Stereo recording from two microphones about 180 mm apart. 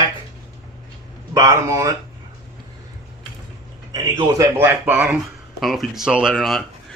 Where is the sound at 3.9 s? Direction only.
20° right (ahead or behind); by 5.9 s centre (ahead or behind).